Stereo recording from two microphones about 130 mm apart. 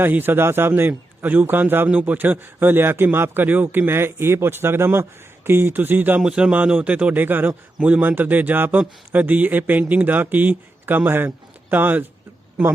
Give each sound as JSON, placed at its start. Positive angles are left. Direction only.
{"t": 0.0, "sound": "speech", "side_deg": -15}